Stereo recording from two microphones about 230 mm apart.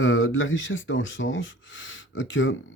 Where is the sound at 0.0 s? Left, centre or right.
Left.